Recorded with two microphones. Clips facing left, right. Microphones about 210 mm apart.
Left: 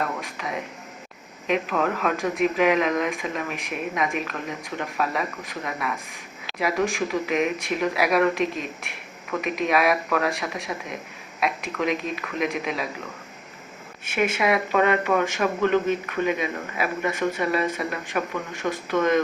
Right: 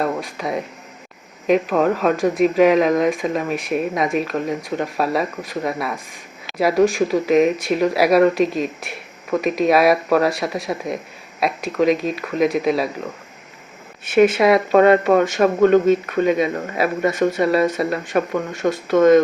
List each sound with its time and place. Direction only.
0.0 s a sound: 35° right (ahead or behind)
1.5 s speech: 40° right (ahead or behind)
14.4 s speech: 35° right (ahead or behind)
15.6 s speech: 50° right (ahead or behind)